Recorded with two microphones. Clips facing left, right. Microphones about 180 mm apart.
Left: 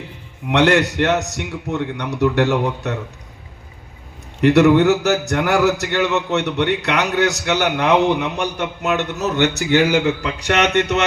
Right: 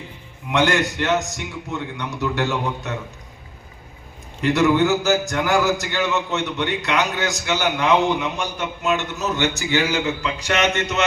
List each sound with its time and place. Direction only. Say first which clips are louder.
0.5 s a man's voice: left 4 dB; 65° left (ahead or behind)
4.4 s a man's voice: left 5 dB; 65° left (ahead or behind)